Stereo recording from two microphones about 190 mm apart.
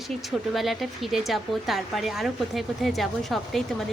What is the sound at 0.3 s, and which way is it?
Speech, centre (ahead or behind).